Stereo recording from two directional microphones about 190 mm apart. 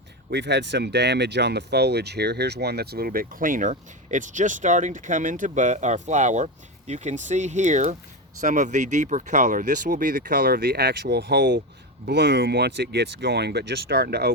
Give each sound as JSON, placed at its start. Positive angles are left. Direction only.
{"t": 0.3, "sound": "speech", "side_deg": -65}